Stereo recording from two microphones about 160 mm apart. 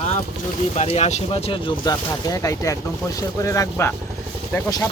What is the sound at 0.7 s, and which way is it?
Speech, 45° left (ahead or behind).